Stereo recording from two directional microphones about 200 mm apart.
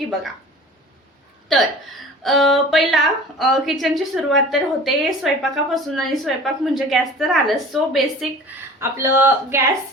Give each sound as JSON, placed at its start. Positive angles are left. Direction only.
{"t": 1.5, "sound": "a woman's voice", "side_deg": 0}
{"t": 8.8, "sound": "speech", "side_deg": -10}